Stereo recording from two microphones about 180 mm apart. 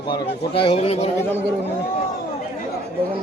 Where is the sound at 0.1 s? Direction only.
30° left (ahead or behind).